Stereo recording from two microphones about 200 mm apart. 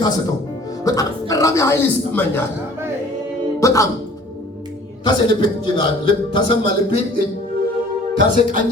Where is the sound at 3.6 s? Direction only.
15° left (ahead or behind).